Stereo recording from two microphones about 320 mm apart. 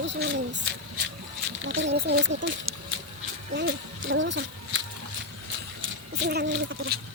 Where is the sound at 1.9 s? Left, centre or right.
Right.